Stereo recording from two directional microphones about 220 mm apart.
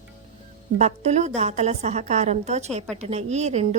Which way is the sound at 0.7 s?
30° right (ahead or behind).